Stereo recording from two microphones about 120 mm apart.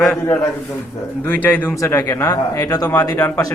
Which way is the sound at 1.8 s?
25° left (ahead or behind).